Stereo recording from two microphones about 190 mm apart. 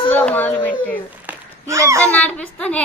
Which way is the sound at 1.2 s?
15° right (ahead or behind).